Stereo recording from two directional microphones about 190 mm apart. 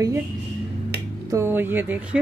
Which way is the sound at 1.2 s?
15° right (ahead or behind).